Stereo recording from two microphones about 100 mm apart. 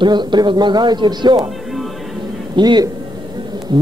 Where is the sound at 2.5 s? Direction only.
50° right (ahead or behind).